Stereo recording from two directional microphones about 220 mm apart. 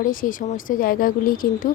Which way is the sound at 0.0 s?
40° left (ahead or behind).